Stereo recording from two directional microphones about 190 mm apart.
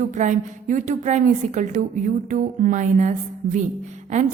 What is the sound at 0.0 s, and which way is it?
A woman's voice, 40° right (ahead or behind).